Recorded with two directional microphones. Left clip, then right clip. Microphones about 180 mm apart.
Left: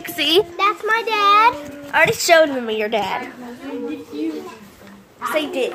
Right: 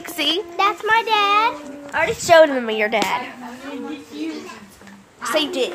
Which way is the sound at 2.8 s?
10° right (ahead or behind).